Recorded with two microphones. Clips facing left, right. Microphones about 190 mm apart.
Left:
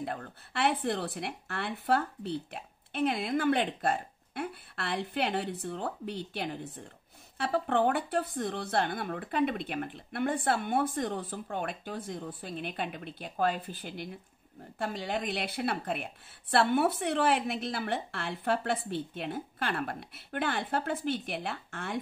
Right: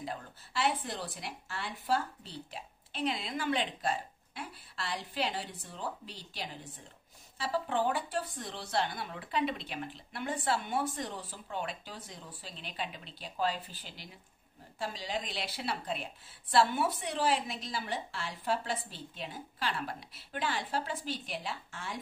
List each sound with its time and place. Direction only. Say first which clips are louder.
0.0 s a woman's voice: left 4 dB; 60° left (ahead or behind)